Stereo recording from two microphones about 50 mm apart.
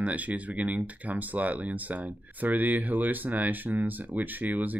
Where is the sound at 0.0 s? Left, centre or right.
Right.